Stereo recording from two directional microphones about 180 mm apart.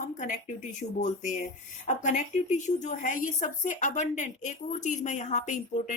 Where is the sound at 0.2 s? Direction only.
45° left (ahead or behind).